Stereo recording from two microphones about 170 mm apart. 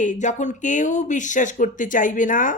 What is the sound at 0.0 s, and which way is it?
Speech, 45° left (ahead or behind).